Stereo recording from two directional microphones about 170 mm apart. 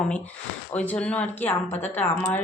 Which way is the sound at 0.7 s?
10° left (ahead or behind).